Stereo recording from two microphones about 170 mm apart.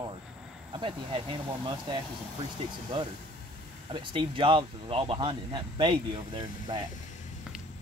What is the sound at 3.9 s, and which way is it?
Speech, 30° right (ahead or behind).